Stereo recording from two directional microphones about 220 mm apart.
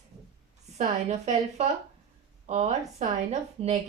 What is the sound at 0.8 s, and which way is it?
A woman's voice, 30° right (ahead or behind).